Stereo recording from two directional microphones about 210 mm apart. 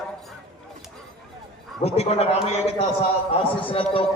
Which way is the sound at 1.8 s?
30° left (ahead or behind).